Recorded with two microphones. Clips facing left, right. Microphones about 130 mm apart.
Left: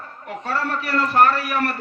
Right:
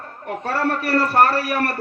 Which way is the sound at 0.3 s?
45° right (ahead or behind).